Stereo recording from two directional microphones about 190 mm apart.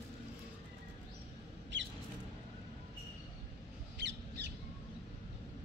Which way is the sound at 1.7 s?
70° right (ahead or behind).